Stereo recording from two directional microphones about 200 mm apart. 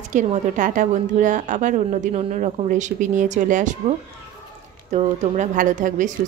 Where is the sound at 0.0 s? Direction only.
35° right (ahead or behind).